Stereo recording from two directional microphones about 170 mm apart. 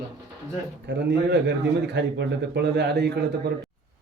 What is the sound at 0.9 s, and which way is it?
A man's voice, 90° right.